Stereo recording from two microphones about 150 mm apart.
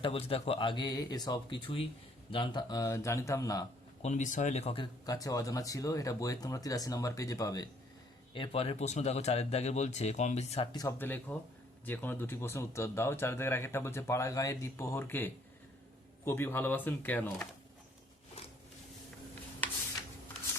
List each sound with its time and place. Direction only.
0.0 s speech: 40° left (ahead or behind); by 3.7 s 25° left (ahead or behind)
4.0 s speech: 55° left (ahead or behind)
5.0 s speech: 25° left (ahead or behind)
8.3 s speech: 40° left (ahead or behind)
10.7 s speech: 25° left (ahead or behind)
10.9 s speech: 10° left (ahead or behind)